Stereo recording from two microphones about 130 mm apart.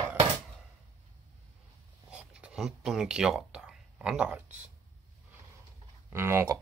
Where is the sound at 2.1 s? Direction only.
10° right (ahead or behind).